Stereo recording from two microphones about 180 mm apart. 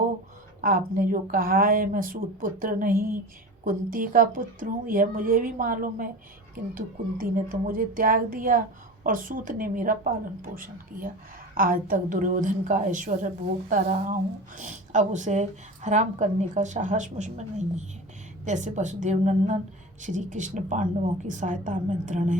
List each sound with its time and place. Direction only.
0.6 s speech: 50° right (ahead or behind)